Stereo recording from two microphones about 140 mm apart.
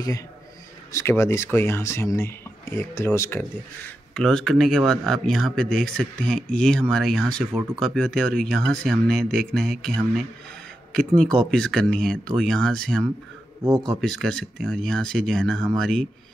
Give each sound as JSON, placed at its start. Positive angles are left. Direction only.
{"t": 0.9, "sound": "speech", "side_deg": 20}